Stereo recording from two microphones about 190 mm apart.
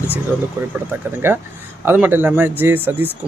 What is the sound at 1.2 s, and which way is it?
A man's voice, 10° right (ahead or behind).